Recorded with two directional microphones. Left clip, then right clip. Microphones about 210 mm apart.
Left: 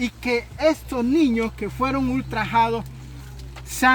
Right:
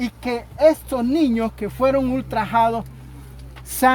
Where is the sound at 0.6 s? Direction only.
50° right (ahead or behind).